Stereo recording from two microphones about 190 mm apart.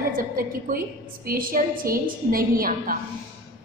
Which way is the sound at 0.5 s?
50° right (ahead or behind).